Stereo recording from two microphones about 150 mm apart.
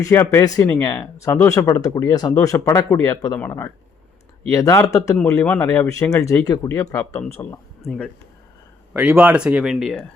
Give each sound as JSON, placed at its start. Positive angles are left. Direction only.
{"t": 0.0, "sound": "speech", "side_deg": 20}
{"t": 7.9, "sound": "speech", "side_deg": 5}
{"t": 8.9, "sound": "speech", "side_deg": -10}